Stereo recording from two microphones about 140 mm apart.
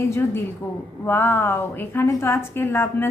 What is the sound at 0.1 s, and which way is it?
Speech, 20° left (ahead or behind).